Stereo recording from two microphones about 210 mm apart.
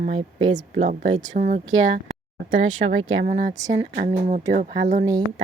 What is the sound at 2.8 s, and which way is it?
A woman's voice, 45° right (ahead or behind).